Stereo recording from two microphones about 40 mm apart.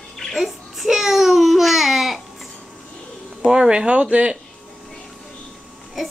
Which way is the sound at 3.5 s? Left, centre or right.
Centre.